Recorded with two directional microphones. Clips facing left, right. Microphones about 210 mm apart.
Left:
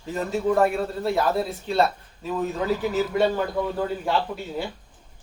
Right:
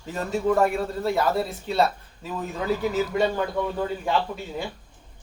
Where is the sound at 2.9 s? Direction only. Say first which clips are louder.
Left 1 dB; 5° left (ahead or behind).